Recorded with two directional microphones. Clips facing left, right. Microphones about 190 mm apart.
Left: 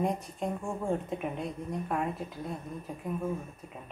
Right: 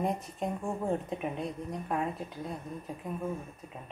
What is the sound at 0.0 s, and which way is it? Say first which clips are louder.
Speech: left 1 dB; centre (ahead or behind).